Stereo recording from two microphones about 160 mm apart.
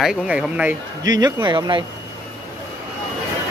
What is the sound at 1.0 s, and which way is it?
Speech, 25° right (ahead or behind).